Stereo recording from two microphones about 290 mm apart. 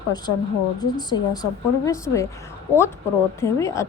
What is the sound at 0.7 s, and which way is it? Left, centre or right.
A woman's voice, centre.